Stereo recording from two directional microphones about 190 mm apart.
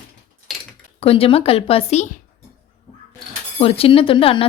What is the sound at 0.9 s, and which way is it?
Speech, 30° left (ahead or behind).